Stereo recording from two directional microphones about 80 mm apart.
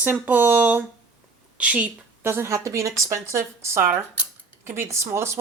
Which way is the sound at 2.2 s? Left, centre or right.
Right.